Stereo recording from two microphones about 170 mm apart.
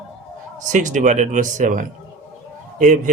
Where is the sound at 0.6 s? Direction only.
50° right (ahead or behind).